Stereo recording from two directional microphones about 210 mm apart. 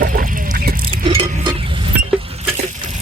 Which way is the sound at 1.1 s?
20° right (ahead or behind).